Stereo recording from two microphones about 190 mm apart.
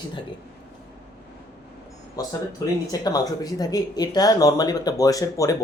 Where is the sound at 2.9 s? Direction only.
20° left (ahead or behind).